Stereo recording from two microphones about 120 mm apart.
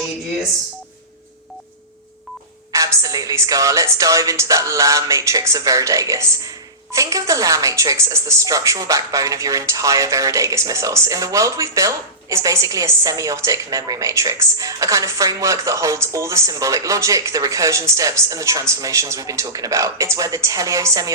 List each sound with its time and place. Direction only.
2.7 s speech: 30° right (ahead or behind)